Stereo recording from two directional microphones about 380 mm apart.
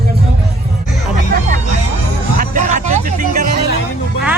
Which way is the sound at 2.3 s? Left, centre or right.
Right.